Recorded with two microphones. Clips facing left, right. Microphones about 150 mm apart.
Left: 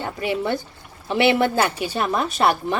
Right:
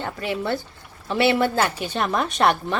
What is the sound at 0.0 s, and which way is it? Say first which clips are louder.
Speech: left 2 dB; 15° left (ahead or behind).